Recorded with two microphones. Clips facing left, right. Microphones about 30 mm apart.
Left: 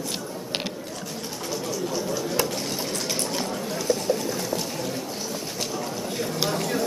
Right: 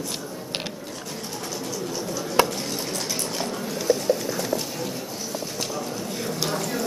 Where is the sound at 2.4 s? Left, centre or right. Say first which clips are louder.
Right 8 dB; right.